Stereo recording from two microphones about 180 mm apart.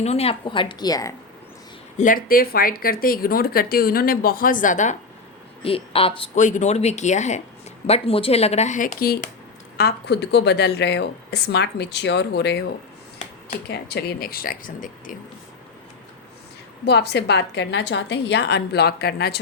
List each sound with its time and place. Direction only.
0.0 s a woman's voice: 35° left (ahead or behind); by 1.1 s 20° left (ahead or behind)
2.0 s a woman's voice: 50° left (ahead or behind)
5.6 s speech: 30° left (ahead or behind); by 9.3 s 50° left (ahead or behind)
9.7 s speech: 65° left (ahead or behind)
13.7 s speech: 65° left (ahead or behind); by 15.1 s 50° left (ahead or behind)
16.8 s speech: 65° left (ahead or behind)